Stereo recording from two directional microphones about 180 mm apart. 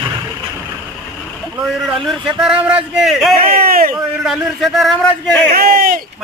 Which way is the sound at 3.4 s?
50° right (ahead or behind).